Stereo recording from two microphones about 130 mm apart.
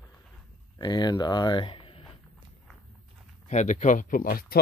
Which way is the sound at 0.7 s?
35° left (ahead or behind).